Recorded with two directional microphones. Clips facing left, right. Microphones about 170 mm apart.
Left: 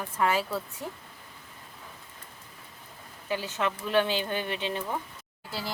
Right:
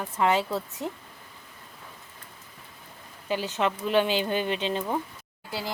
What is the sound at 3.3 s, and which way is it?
Speech, 20° right (ahead or behind).